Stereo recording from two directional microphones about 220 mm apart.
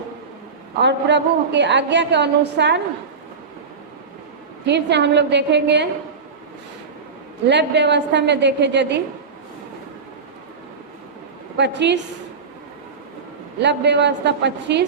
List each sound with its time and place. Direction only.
0.8 s a woman's voice: 50° right (ahead or behind)
4.6 s a woman's voice: 50° right (ahead or behind)
7.4 s a woman's voice: 50° right (ahead or behind)
11.5 s a woman's voice: 50° right (ahead or behind)
13.6 s a woman's voice: 50° right (ahead or behind)